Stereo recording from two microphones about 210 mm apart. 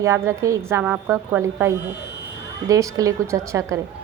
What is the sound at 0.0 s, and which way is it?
A woman's voice, 15° right (ahead or behind).